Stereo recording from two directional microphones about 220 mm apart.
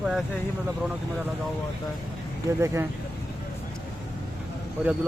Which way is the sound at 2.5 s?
15° right (ahead or behind).